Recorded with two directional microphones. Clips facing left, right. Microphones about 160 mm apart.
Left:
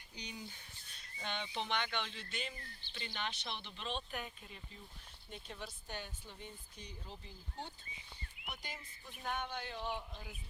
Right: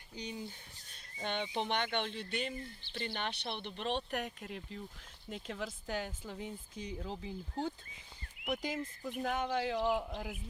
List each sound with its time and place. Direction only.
1.2 s speech: 50° right (ahead or behind); by 4.8 s 80° right
5.3 s speech: 90° right
8.4 s speech: 90° right